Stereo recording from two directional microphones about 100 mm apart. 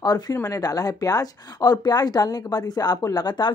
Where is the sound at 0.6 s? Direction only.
40° left (ahead or behind).